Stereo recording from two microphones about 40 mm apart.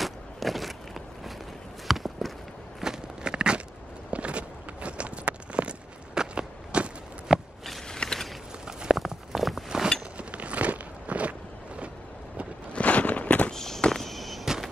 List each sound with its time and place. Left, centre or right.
0.0 s a sound: centre
1.9 s walk: centre
2.8 s walk: centre
7.9 s mechanisms: centre
8.9 s walk: centre
10.1 s walk: right
12.7 s a sound: left
13.5 s walk: centre
14.0 s a sound: centre